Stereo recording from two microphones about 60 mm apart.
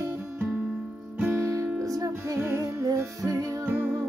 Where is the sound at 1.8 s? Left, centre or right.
Right.